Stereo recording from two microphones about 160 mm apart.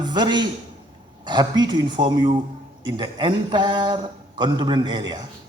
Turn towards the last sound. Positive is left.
turn(degrees=-25)  # may be behind; listen again after turning